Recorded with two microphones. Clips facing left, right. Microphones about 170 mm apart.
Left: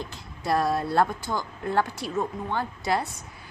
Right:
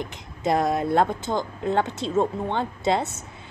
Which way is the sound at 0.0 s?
20° right (ahead or behind).